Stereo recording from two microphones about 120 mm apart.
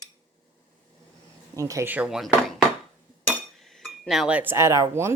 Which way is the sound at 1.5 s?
25° right (ahead or behind).